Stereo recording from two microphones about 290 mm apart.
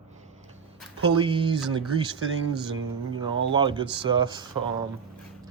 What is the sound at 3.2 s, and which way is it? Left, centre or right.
Speech, centre.